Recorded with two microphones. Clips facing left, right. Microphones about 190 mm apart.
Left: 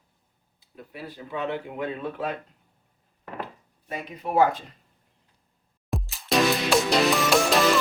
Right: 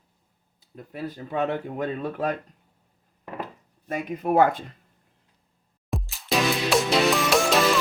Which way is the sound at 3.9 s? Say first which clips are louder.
Right 6 dB; 50° right (ahead or behind).